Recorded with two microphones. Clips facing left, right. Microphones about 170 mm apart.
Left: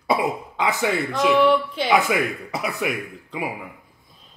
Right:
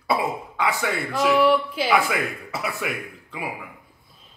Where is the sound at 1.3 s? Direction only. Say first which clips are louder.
Left 1 dB; centre (ahead or behind).